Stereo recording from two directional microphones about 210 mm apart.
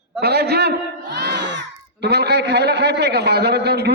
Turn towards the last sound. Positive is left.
turn(degrees=-50)  # may be behind; listen again after turning